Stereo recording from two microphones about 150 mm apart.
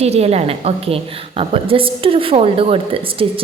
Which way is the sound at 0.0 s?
45° right (ahead or behind).